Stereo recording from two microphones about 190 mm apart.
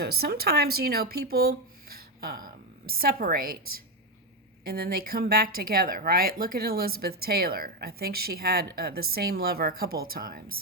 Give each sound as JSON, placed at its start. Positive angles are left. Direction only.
{"t": 0.0, "sound": "a woman's voice", "side_deg": -55}
{"t": 4.6, "sound": "speech", "side_deg": -55}